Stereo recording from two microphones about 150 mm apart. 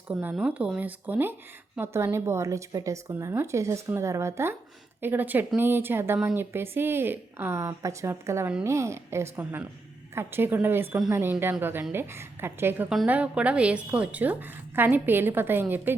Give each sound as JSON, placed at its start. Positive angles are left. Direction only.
{"t": 0.1, "sound": "speech", "side_deg": -10}